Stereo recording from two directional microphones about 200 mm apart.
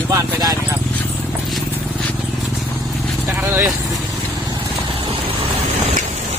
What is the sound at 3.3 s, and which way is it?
Vehicle, 10° right (ahead or behind).